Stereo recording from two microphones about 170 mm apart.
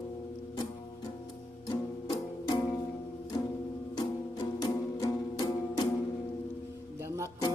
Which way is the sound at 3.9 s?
25° left (ahead or behind).